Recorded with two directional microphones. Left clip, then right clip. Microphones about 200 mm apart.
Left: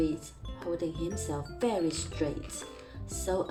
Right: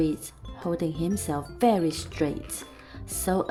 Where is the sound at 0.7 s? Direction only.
45° right (ahead or behind).